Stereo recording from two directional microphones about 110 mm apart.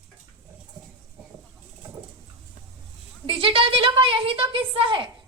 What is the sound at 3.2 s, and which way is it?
A woman's voice, 55° right (ahead or behind).